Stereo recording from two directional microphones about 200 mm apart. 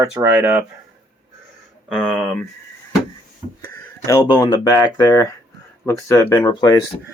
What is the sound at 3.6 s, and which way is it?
Speech, 15° left (ahead or behind).